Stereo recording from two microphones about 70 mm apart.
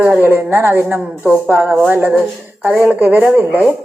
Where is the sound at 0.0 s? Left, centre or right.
Right.